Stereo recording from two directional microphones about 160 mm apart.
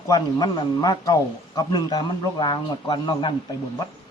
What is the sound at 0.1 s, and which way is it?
A man's voice, 25° left (ahead or behind).